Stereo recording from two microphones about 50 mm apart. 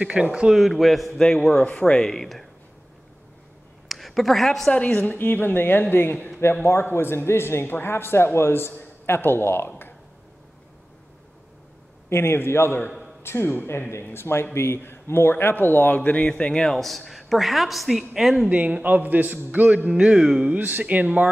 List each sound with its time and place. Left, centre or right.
0.2 s a woman's voice: centre
1.2 s speech: centre
2.0 s speech: centre
3.9 s a woman's voice: centre
4.8 s speech: left
5.1 s speech: left
12.1 s a man's voice: left
15.9 s speech: left
16.3 s speech: centre
16.6 s a woman's voice: centre
18.5 s a man's voice: right
19.9 s music: centre
20.4 s a man's voice: right